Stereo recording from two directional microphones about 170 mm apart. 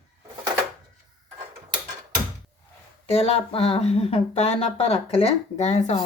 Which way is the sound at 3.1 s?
35° left (ahead or behind).